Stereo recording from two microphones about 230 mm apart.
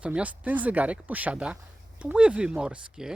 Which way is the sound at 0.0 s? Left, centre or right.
Centre.